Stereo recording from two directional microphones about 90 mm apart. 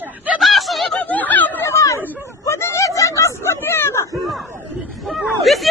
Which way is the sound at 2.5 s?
30° left (ahead or behind).